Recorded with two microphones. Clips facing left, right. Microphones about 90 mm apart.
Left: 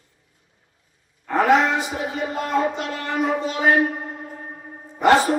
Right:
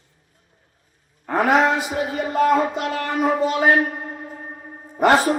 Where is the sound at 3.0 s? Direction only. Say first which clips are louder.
Right 2 dB; 45° right (ahead or behind).